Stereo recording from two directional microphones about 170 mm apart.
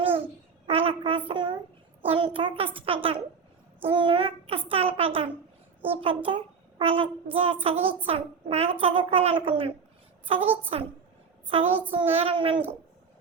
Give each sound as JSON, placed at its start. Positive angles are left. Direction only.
{"t": 0.7, "sound": "a sound", "side_deg": -35}
{"t": 1.3, "sound": "a child's voice", "side_deg": -30}
{"t": 10.4, "sound": "a woman's voice", "side_deg": -10}
{"t": 11.4, "sound": "a woman's voice", "side_deg": -35}